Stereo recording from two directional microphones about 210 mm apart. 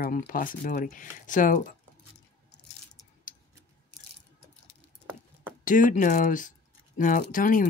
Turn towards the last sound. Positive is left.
turn(degrees=40)  # may be behind; listen again after turning